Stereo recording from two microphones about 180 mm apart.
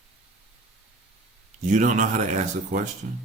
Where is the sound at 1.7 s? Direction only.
45° right (ahead or behind).